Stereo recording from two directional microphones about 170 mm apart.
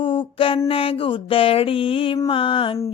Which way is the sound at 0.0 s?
30° left (ahead or behind).